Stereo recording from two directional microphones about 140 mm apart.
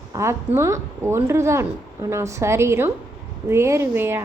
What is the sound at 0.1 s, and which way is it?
A woman's voice, 20° right (ahead or behind).